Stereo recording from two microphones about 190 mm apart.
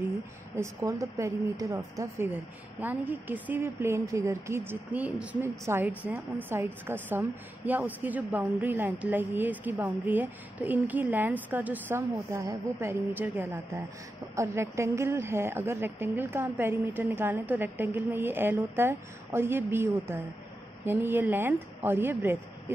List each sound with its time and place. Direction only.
0.6 s a woman's voice: 15° right (ahead or behind)